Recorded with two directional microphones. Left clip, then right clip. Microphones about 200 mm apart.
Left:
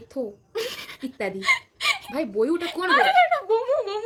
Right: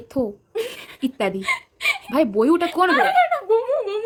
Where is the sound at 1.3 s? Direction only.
10° left (ahead or behind).